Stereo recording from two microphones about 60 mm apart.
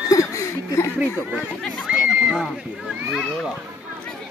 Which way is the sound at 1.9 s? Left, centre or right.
Centre.